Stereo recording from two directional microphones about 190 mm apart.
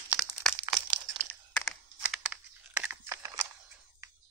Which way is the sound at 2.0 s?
5° right (ahead or behind).